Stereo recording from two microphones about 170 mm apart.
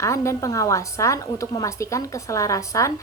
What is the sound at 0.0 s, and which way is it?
A woman's voice, 15° left (ahead or behind).